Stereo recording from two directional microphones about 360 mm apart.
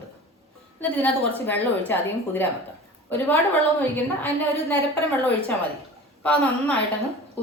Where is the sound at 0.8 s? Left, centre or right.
Centre.